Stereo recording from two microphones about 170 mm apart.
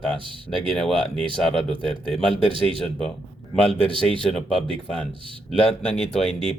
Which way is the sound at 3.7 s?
5° left (ahead or behind).